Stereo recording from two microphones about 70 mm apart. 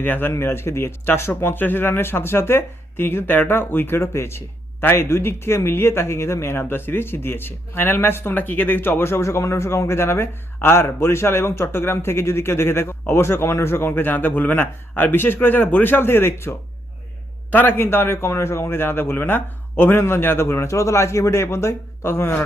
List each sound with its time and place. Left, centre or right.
0.0 s speech: left